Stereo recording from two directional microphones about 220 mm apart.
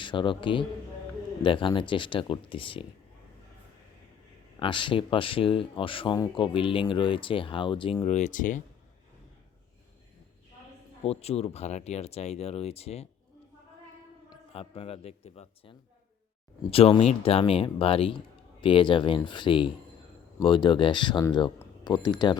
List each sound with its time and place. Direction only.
0.0 s a man's voice: 20° left (ahead or behind)
4.6 s speech: 20° left (ahead or behind)
11.0 s speech: 30° left (ahead or behind)
14.5 s speech: 25° left (ahead or behind)